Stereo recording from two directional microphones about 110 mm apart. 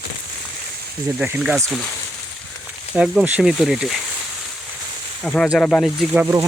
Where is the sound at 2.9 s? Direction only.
10° right (ahead or behind).